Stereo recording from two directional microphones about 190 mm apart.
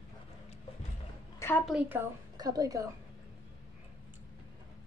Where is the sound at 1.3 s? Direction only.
10° left (ahead or behind).